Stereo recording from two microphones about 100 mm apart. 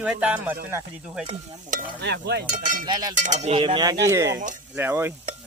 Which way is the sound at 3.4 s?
75° right (ahead or behind).